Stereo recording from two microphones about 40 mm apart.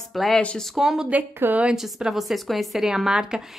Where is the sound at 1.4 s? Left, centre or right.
Right.